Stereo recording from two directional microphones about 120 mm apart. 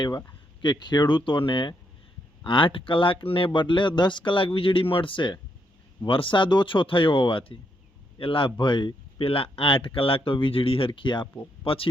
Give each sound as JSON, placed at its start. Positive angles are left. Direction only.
{"t": 0.6, "sound": "speech", "side_deg": 40}